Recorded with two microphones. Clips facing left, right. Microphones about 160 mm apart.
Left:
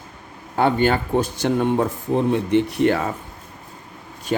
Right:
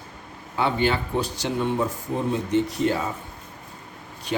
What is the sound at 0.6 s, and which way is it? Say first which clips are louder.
Speech: left 5 dB; 50° left (ahead or behind).